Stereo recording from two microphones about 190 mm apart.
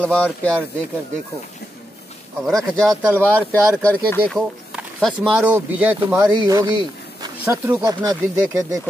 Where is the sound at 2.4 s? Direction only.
Centre (ahead or behind).